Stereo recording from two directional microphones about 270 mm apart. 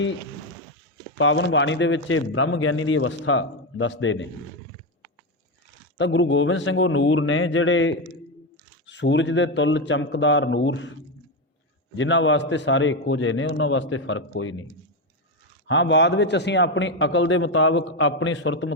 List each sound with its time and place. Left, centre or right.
1.2 s a man's voice: left
6.0 s a man's voice: left
11.9 s a man's voice: left
15.6 s a man's voice: left